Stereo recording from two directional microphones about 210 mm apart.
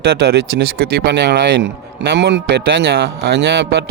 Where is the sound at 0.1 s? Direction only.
50° right (ahead or behind).